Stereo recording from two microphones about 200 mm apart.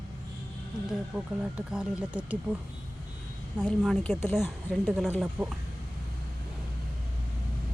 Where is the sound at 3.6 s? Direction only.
Centre (ahead or behind).